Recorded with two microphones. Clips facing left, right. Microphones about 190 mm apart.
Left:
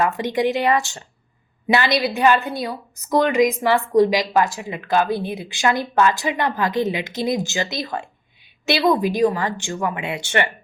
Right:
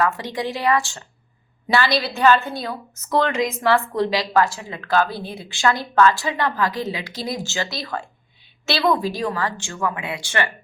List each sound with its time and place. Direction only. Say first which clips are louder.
0.0 s a woman's voice: left 3 dB; 20° left (ahead or behind)